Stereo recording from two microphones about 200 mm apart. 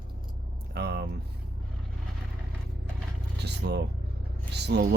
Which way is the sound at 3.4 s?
55° right (ahead or behind).